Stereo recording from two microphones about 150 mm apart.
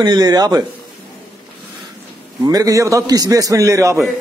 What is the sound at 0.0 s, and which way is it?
Speech, 25° right (ahead or behind).